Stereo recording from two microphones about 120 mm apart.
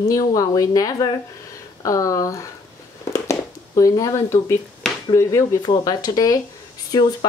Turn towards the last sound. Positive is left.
turn(degrees=35)  # may be behind; listen again after turning